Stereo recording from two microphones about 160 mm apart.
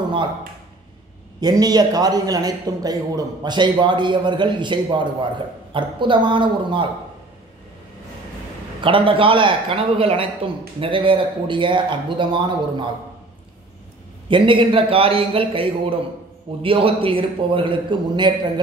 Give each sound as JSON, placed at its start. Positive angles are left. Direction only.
{"t": 1.4, "sound": "a man's voice", "side_deg": -25}
{"t": 8.8, "sound": "speech", "side_deg": -35}
{"t": 14.3, "sound": "speech", "side_deg": -30}